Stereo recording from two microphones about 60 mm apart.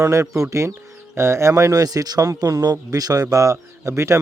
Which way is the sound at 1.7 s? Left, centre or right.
Right.